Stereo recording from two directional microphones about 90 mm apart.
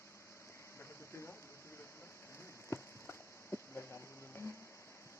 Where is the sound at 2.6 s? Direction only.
25° left (ahead or behind).